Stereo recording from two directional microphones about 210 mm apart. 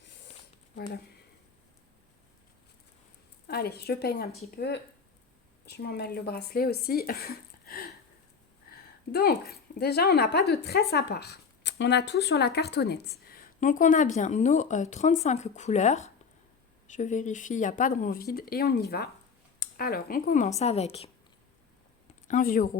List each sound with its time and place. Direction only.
3.4 s a woman's voice: 50° left (ahead or behind); by 21.1 s 30° left (ahead or behind)
22.3 s speech: 40° left (ahead or behind)